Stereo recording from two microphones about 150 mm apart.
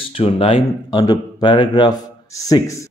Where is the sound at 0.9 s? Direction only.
30° left (ahead or behind).